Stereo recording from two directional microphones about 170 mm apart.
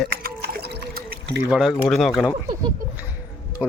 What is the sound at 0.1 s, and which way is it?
Pour, 60° right (ahead or behind).